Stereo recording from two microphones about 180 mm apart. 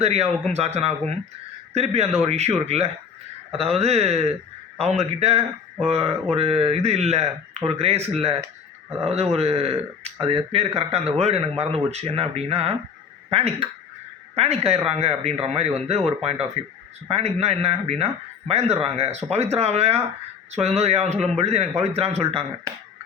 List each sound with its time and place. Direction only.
0.0 s a man's voice: 35° right (ahead or behind)